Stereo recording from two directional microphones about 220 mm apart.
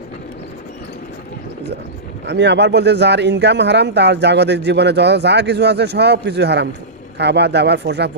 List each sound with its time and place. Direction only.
2.2 s speech: 50° right (ahead or behind)